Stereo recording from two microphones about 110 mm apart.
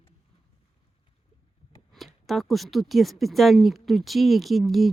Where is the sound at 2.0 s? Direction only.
Centre (ahead or behind).